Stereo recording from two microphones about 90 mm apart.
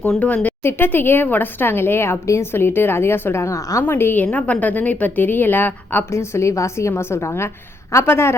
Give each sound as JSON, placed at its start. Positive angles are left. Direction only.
{"t": 0.0, "sound": "a woman's voice", "side_deg": 15}
{"t": 3.8, "sound": "speech", "side_deg": 25}
{"t": 6.1, "sound": "a woman's voice", "side_deg": 30}